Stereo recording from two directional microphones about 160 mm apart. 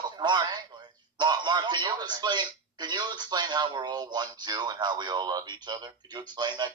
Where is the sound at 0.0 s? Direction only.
30° right (ahead or behind).